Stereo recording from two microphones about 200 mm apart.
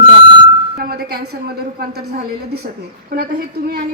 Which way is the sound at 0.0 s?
25° right (ahead or behind).